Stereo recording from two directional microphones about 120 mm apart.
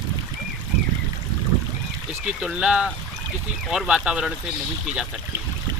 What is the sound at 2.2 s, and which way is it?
Speech, 10° right (ahead or behind).